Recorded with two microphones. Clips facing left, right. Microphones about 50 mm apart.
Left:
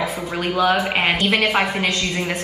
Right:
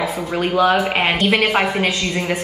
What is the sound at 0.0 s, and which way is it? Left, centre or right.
A woman's voice, centre.